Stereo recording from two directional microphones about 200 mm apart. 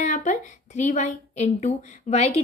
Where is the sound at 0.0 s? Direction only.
40° left (ahead or behind).